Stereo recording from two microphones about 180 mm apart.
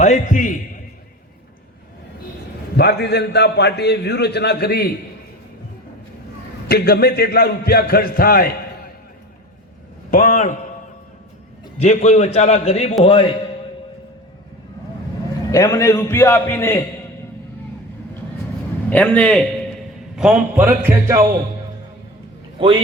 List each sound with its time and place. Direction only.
0.0 s a sound: 45° left (ahead or behind)
2.7 s a man's voice: 65° left (ahead or behind)
6.7 s a man's voice: 60° left (ahead or behind)
10.1 s a man's voice: 45° left (ahead or behind)
11.8 s a man's voice: 40° left (ahead or behind)
15.5 s a man's voice: 15° left (ahead or behind)
18.9 s a man's voice: 10° left (ahead or behind)
20.1 s music: 5° right (ahead or behind)
22.6 s a man's voice: 25° right (ahead or behind)